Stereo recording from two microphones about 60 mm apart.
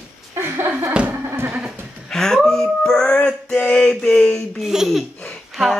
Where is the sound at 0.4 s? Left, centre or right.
Right.